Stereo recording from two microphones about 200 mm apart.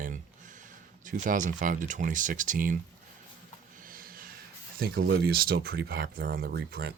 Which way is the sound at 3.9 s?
45° right (ahead or behind).